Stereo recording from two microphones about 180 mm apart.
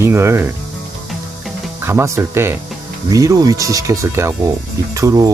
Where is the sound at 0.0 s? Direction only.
15° right (ahead or behind).